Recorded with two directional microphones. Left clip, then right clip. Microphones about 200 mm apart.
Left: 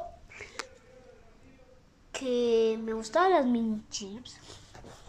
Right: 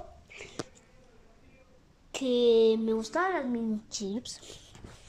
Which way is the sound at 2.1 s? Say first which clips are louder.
Right 3 dB; 15° right (ahead or behind).